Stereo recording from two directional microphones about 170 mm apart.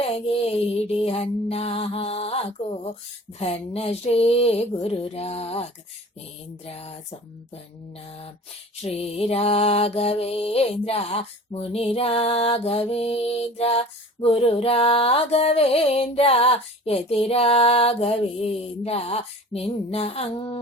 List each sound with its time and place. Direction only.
0.0 s music: 35° left (ahead or behind)
6.7 s music: 40° left (ahead or behind)
8.8 s music: 35° left (ahead or behind)